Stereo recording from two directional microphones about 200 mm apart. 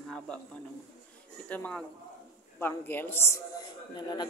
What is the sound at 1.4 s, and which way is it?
A woman's voice, 5° left (ahead or behind).